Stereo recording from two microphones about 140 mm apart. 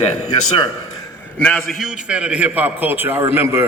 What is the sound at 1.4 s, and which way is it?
A man's voice, 5° left (ahead or behind).